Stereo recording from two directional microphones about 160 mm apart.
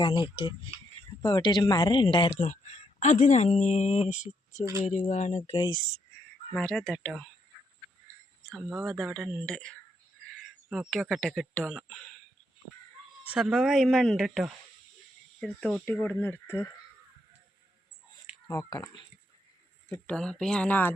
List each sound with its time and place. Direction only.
0.0 s speech: 30° left (ahead or behind); by 5.5 s 45° left (ahead or behind)
5.5 s speech: 30° left (ahead or behind)
6.5 s speech: 5° left (ahead or behind)
8.7 s speech: centre (ahead or behind)
13.2 s speech: 5° right (ahead or behind); by 16.6 s 15° left (ahead or behind)
18.4 s speech: 20° left (ahead or behind)
19.9 s speech: 5° left (ahead or behind)